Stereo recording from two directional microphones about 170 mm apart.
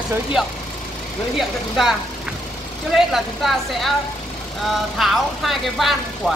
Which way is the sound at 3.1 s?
Centre (ahead or behind).